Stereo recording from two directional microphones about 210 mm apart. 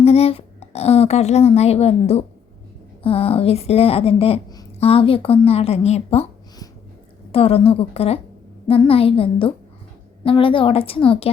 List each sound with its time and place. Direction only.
0.0 s speech: 30° left (ahead or behind)
7.3 s speech: 25° left (ahead or behind)